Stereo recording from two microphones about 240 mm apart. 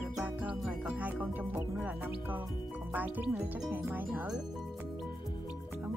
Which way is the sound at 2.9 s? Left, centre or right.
Centre.